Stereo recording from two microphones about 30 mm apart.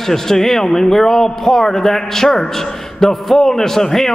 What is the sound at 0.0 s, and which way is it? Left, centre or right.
A man's voice, centre.